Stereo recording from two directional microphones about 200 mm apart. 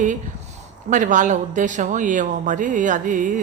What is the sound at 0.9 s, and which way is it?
Speech, 40° right (ahead or behind).